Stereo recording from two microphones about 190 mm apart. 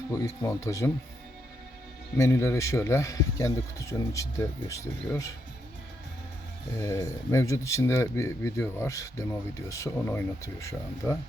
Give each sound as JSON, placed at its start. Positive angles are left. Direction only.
{"t": 0.1, "sound": "speech", "side_deg": 15}
{"t": 2.1, "sound": "speech", "side_deg": 15}
{"t": 6.7, "sound": "speech", "side_deg": 15}